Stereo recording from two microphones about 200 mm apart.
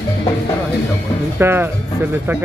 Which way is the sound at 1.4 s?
10° right (ahead or behind).